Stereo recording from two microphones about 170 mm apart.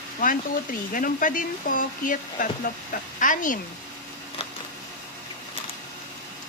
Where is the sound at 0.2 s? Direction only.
55° left (ahead or behind).